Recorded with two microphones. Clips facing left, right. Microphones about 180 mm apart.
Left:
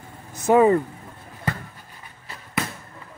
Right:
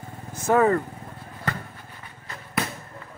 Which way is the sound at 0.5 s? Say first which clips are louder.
Left 4 dB; 15° left (ahead or behind).